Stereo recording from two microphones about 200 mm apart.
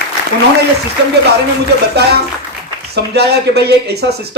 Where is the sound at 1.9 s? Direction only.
55° right (ahead or behind).